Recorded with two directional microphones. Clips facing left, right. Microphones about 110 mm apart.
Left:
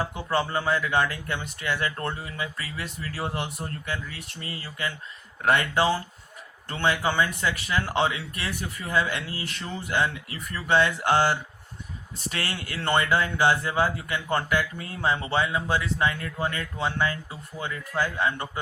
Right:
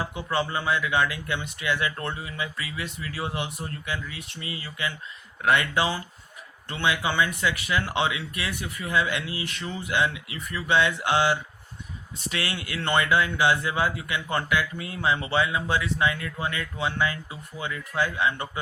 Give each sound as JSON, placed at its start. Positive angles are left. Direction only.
{"t": 0.1, "sound": "speech", "side_deg": 40}